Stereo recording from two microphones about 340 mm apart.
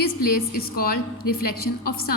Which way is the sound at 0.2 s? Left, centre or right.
Left.